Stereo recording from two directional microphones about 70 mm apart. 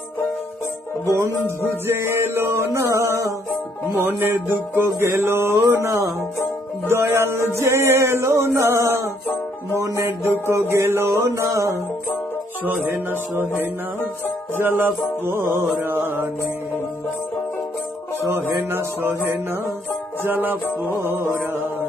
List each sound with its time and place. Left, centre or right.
1.9 s music: right
4.0 s music: right
6.9 s music: right
10.5 s music: right
12.6 s music: right
14.6 s music: right
18.6 s music: right
20.2 s music: right